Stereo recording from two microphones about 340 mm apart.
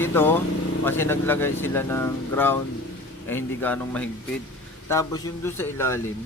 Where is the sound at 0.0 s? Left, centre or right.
Centre.